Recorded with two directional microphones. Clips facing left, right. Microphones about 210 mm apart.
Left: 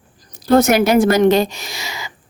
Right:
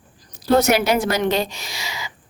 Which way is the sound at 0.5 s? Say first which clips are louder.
Left 5 dB; 50° left (ahead or behind).